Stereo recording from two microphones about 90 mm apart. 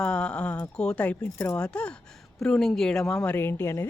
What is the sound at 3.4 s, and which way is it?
Speech, 25° left (ahead or behind).